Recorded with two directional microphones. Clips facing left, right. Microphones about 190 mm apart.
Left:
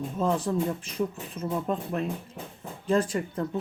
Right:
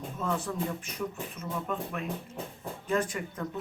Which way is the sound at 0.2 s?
30° left (ahead or behind).